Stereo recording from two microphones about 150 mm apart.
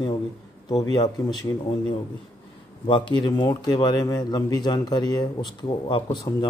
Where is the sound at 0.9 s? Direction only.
25° left (ahead or behind).